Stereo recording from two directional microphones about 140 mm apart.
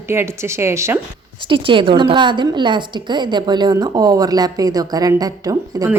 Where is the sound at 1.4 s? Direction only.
35° right (ahead or behind).